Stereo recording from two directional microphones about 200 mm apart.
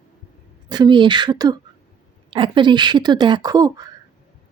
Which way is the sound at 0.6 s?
20° right (ahead or behind).